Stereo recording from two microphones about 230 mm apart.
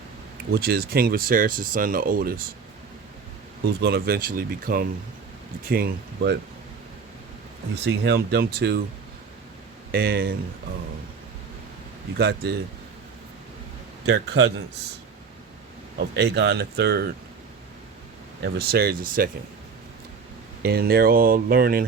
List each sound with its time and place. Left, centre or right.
0.5 s speech: right
3.8 s speech: right
7.9 s speech: right
9.9 s speech: right
12.1 s speech: right
14.0 s speech: right
16.0 s speech: right
18.4 s speech: right
20.6 s speech: right